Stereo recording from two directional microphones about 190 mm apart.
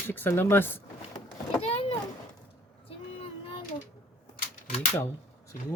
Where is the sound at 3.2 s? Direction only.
30° left (ahead or behind).